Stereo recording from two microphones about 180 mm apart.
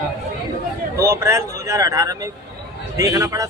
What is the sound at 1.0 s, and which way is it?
A man's voice, 15° right (ahead or behind).